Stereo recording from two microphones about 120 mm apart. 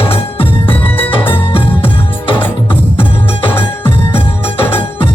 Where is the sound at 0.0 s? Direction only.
20° left (ahead or behind).